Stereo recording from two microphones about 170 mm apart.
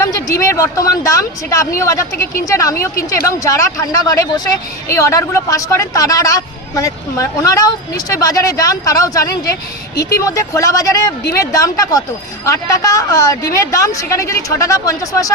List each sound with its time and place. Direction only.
0.0 s speech: 20° left (ahead or behind)